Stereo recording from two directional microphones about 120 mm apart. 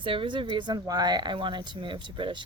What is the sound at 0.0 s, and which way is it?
Speech, 45° right (ahead or behind).